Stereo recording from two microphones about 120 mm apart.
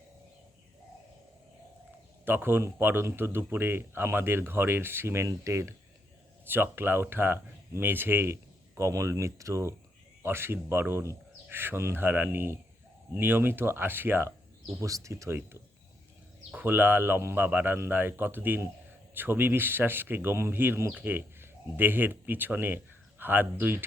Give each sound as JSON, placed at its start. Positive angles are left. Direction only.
{"t": 2.2, "sound": "speech", "side_deg": -15}